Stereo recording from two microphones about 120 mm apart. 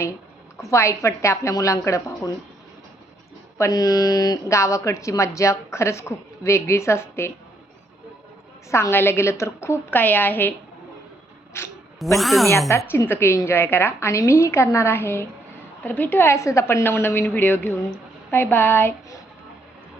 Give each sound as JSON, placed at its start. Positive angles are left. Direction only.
{"t": 0.7, "sound": "speech", "side_deg": 25}
{"t": 3.6, "sound": "speech", "side_deg": 30}
{"t": 8.7, "sound": "speech", "side_deg": 20}
{"t": 11.6, "sound": "speech", "side_deg": 20}
{"t": 12.1, "sound": "speech", "side_deg": 0}
{"t": 12.9, "sound": "a woman's voice", "side_deg": 20}